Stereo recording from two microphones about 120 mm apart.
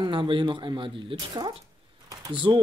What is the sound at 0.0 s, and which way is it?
A man's voice, 45° right (ahead or behind).